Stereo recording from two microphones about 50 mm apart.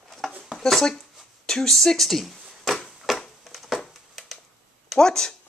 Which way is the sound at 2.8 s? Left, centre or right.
Centre.